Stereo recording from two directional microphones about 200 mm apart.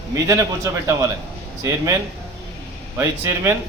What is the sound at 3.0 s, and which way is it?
Speech, 15° right (ahead or behind).